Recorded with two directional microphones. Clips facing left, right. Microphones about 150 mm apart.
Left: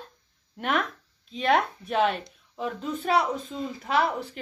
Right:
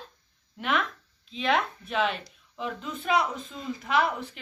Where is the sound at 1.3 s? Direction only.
45° left (ahead or behind).